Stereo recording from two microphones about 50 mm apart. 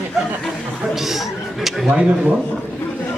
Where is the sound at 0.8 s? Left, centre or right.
Centre.